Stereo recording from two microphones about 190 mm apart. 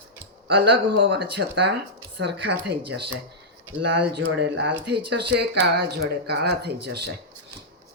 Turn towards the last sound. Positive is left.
turn(degrees=-60)  # may be behind; listen again after turning